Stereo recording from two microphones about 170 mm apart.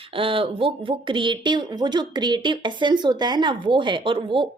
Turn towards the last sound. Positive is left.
turn(degrees=-30)  # may be behind; listen again after turning